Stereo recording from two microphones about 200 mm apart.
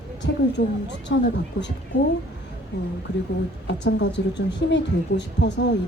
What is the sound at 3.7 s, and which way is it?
Speech, 60° left (ahead or behind).